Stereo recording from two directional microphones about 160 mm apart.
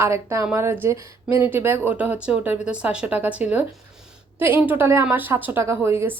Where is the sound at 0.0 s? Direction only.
20° right (ahead or behind).